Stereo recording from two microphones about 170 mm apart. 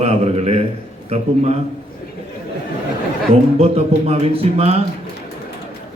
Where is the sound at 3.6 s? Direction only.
40° right (ahead or behind).